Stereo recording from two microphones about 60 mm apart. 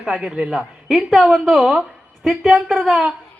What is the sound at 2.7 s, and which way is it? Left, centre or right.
Speech, centre.